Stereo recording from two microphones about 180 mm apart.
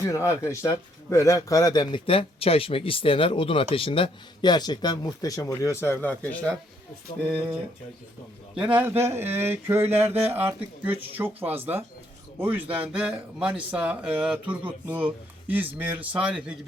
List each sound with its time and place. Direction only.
0.0 s a man's voice: 15° left (ahead or behind)
8.5 s speech: 10° right (ahead or behind)